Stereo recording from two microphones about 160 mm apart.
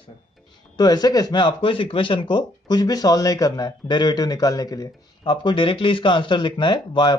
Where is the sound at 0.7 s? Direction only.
25° left (ahead or behind).